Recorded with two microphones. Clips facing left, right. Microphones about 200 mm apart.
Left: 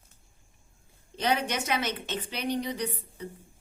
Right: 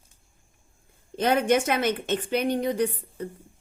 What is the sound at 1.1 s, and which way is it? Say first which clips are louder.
A woman's voice: right 7 dB; 50° right (ahead or behind).